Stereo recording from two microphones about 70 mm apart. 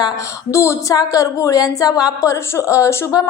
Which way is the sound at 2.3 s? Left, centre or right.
Left.